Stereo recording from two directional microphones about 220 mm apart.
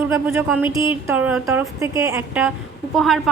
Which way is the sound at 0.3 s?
5° right (ahead or behind).